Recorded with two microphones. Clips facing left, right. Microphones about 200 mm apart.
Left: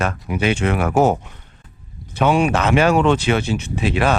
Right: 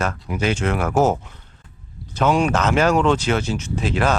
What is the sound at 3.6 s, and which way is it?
Speech, 60° left (ahead or behind).